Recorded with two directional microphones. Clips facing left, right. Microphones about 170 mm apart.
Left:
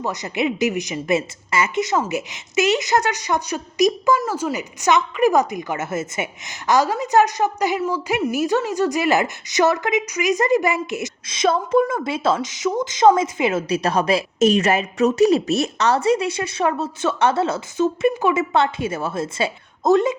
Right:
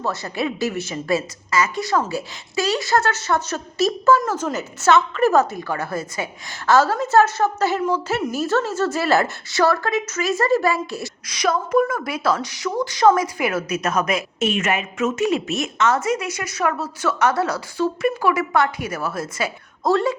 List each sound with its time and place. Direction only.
0.0 s a woman's voice: 15° left (ahead or behind)